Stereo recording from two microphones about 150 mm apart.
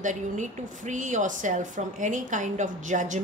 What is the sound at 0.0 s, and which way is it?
A woman's voice, 55° right (ahead or behind).